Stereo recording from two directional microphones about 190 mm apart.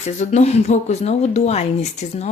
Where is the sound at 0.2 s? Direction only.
35° left (ahead or behind).